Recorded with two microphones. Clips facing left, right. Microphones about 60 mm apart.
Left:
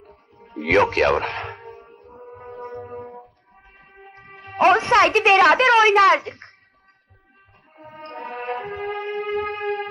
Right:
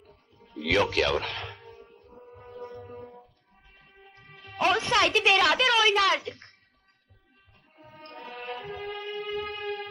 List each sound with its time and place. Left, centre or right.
0.0 s music: left
7.8 s music: left